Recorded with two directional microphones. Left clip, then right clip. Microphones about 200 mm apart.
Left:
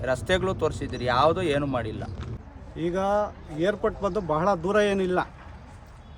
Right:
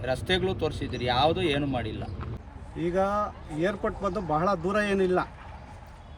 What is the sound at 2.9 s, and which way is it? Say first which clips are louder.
Speech: left 2 dB; 40° left (ahead or behind).